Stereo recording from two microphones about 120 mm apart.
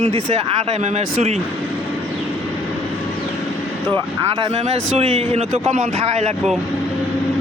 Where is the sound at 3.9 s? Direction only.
40° right (ahead or behind).